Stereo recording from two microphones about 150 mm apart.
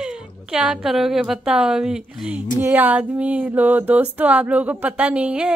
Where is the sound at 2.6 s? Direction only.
10° right (ahead or behind).